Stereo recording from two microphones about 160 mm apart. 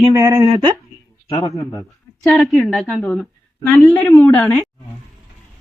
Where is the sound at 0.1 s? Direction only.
20° right (ahead or behind).